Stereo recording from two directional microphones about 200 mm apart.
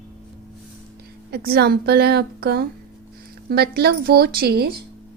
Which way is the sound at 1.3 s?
50° right (ahead or behind).